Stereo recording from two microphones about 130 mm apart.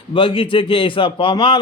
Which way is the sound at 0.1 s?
40° left (ahead or behind).